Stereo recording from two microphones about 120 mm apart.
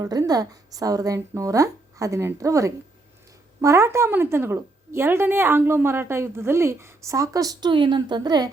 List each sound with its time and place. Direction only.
0.0 s a woman's voice: 30° right (ahead or behind)